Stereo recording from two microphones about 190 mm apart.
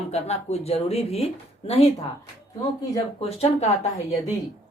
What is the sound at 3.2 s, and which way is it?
Speech, 35° left (ahead or behind).